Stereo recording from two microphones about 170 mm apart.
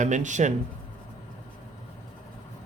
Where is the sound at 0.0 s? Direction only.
45° right (ahead or behind).